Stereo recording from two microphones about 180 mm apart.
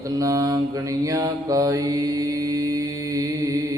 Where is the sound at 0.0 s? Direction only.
20° right (ahead or behind).